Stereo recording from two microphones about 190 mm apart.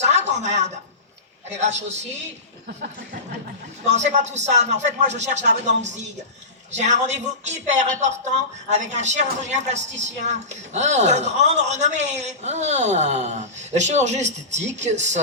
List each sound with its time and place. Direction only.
0.0 s a sound: 35° right (ahead or behind)
1.5 s a woman's voice: 35° right (ahead or behind)
3.8 s a woman's voice: 35° right (ahead or behind)